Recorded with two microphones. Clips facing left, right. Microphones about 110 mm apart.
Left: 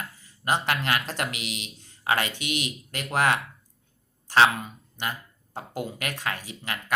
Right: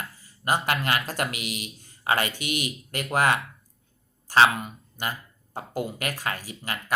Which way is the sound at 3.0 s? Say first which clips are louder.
Right 1 dB; 5° right (ahead or behind).